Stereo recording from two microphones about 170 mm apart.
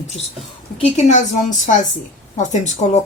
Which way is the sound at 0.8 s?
45° left (ahead or behind).